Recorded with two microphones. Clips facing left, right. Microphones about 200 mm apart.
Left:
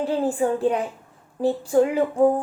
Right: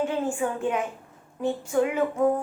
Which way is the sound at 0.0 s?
35° left (ahead or behind).